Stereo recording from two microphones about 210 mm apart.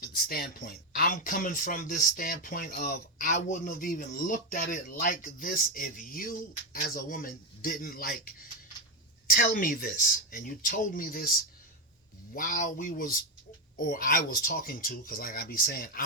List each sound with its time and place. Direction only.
0.0 s speech: 45° left (ahead or behind)
9.2 s speech: 40° left (ahead or behind)
12.3 s speech: 40° left (ahead or behind)